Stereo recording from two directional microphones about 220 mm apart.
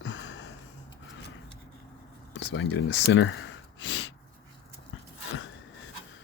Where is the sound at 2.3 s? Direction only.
55° left (ahead or behind).